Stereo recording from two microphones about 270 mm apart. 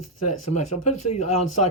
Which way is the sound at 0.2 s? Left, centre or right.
Left.